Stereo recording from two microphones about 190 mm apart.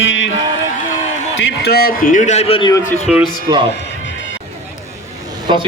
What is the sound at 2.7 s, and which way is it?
Speech, 15° left (ahead or behind).